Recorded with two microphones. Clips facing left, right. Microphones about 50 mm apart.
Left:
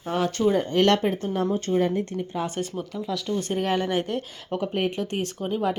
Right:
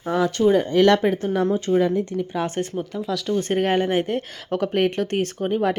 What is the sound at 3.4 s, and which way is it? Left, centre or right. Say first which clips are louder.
Speech: right 5 dB; right.